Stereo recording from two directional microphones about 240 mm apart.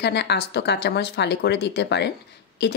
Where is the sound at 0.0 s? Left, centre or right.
Left.